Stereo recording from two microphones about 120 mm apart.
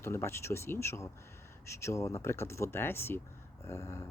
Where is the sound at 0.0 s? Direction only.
20° left (ahead or behind).